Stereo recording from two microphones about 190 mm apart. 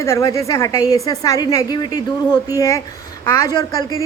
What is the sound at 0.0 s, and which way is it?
A woman's voice, 15° left (ahead or behind).